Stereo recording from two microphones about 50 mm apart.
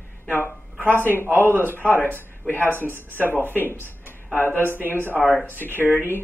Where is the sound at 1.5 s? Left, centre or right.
Right.